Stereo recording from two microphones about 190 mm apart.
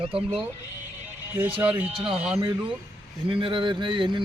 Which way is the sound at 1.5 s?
5° right (ahead or behind).